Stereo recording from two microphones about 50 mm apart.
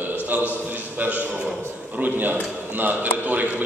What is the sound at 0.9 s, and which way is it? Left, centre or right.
A man's voice, right.